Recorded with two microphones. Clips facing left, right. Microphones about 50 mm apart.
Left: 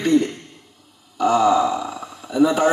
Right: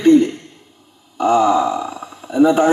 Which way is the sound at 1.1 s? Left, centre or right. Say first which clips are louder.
Right 2 dB; right.